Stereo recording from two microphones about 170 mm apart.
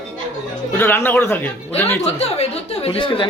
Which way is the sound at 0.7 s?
15° left (ahead or behind).